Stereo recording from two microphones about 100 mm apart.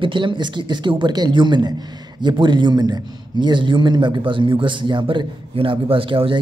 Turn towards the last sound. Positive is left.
turn(degrees=-60)  # may be behind; listen again after turning